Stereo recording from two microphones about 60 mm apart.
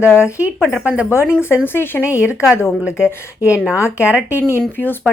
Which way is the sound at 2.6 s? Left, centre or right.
Centre.